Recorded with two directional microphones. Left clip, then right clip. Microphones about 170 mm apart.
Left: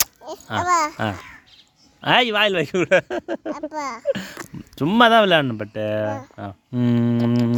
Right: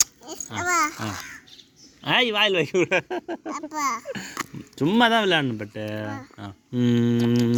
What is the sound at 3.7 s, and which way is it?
Speech, 30° left (ahead or behind).